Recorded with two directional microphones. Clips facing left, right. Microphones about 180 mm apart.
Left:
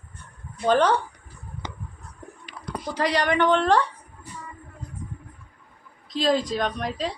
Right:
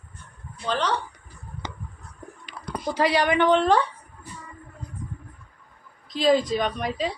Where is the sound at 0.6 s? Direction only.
50° left (ahead or behind).